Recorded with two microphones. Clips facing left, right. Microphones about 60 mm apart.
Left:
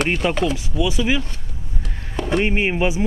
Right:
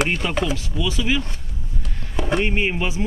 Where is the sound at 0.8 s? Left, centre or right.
Centre.